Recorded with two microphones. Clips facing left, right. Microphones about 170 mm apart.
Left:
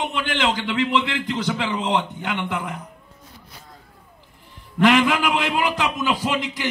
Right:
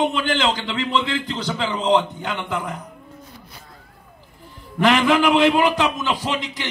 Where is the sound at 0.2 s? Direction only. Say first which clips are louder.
Right 2 dB; 35° right (ahead or behind).